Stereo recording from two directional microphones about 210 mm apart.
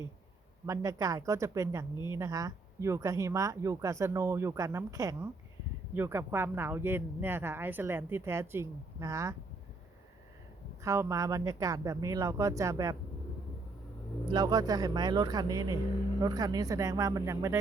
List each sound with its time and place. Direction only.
0.6 s speech: 15° right (ahead or behind)
10.8 s speech: 15° right (ahead or behind)
14.3 s speech: 20° right (ahead or behind)